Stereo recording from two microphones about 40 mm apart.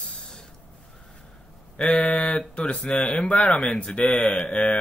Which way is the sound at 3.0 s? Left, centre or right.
Left.